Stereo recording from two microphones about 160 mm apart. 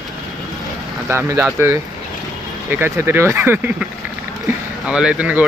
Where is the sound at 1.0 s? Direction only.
15° right (ahead or behind).